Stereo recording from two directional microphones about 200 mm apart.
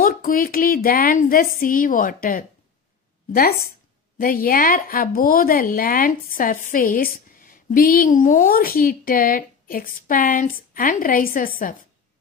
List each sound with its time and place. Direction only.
0.0 s a woman's voice: 45° left (ahead or behind)
4.2 s a woman's voice: 45° left (ahead or behind)